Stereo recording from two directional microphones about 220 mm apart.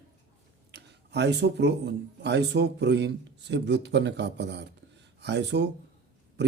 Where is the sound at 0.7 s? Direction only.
50° right (ahead or behind).